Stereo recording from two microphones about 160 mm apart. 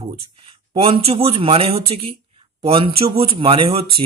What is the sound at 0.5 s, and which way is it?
Speech, 35° right (ahead or behind).